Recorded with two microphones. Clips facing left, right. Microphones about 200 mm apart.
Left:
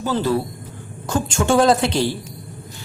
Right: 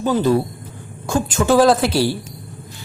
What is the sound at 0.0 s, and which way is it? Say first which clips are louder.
A man's voice: right 4 dB; 15° right (ahead or behind).